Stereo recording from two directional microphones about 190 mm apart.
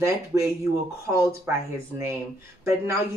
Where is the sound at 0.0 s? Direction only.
15° right (ahead or behind).